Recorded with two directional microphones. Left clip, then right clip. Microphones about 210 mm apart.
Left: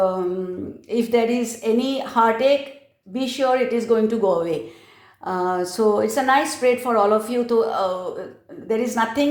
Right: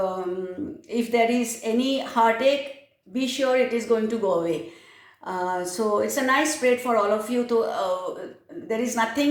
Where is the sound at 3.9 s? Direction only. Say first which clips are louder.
Left 4 dB; 40° left (ahead or behind).